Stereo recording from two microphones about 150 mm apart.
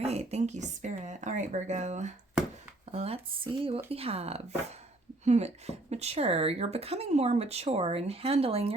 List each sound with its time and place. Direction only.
0.0 s speech: 45° right (ahead or behind)
2.9 s speech: 40° right (ahead or behind)